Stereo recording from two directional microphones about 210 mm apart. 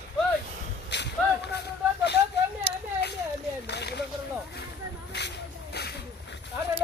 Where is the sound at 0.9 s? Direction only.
55° left (ahead or behind).